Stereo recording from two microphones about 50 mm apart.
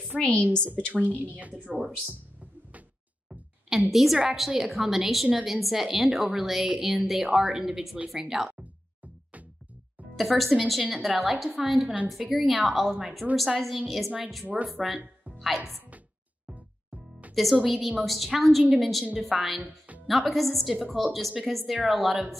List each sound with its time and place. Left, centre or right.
0.2 s a woman's voice: left
0.9 s a woman's voice: right
3.9 s a woman's voice: centre
10.1 s a woman's voice: centre
13.2 s a woman's voice: right
13.6 s a woman's voice: centre
14.4 s a woman's voice: right
14.7 s a woman's voice: centre
16.4 s music: right
17.3 s a woman's voice: centre